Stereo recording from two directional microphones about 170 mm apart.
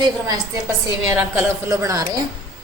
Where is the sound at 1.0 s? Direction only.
10° right (ahead or behind).